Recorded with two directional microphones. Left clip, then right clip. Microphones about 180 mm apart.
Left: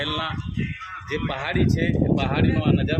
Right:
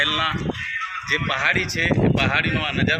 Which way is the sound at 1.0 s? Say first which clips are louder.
Right 7 dB; 25° left (ahead or behind).